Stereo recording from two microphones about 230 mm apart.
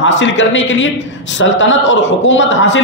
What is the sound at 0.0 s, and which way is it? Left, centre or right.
A man's voice, left.